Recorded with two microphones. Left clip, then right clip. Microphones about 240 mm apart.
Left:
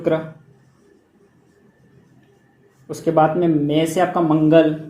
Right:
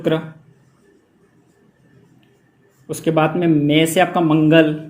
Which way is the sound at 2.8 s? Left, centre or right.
Right.